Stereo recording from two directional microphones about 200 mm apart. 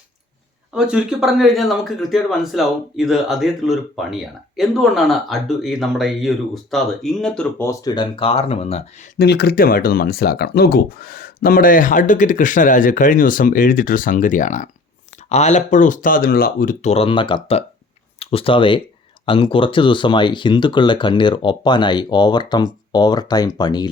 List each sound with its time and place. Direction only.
0.7 s speech: 5° right (ahead or behind); by 8.8 s 30° left (ahead or behind)
9.1 s speech: 55° left (ahead or behind); by 23.9 s 20° left (ahead or behind)